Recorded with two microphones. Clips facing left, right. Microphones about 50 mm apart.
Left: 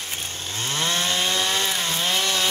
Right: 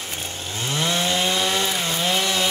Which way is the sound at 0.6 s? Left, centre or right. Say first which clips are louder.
Right 2 dB; left.